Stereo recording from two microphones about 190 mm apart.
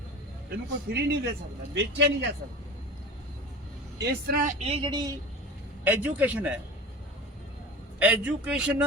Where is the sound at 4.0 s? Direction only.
55° right (ahead or behind).